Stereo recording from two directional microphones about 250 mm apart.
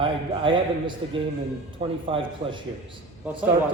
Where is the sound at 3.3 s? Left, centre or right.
Centre.